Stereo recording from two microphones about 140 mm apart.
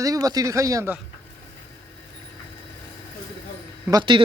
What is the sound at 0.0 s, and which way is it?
Speech, 25° right (ahead or behind).